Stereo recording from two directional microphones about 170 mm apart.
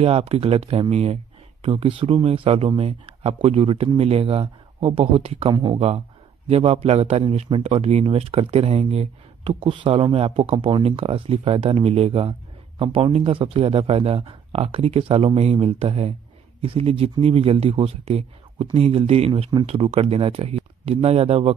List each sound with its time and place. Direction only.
0.0 s speech: 35° right (ahead or behind)
5.8 s speech: 40° right (ahead or behind)